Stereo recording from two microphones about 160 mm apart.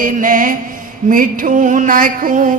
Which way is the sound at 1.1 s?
60° right (ahead or behind).